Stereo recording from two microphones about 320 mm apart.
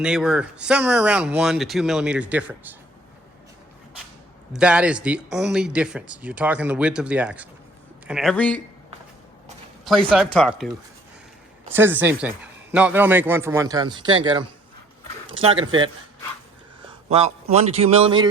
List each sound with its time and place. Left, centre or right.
0.0 s speech: centre
4.5 s speech: centre
9.8 s speech: centre
11.7 s speech: centre
15.3 s speech: centre
17.1 s a man's voice: centre